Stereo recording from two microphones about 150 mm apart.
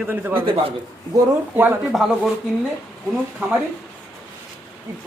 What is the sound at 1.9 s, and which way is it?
Speech, centre (ahead or behind).